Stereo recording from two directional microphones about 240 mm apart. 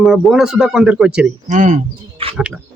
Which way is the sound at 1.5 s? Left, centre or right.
Right.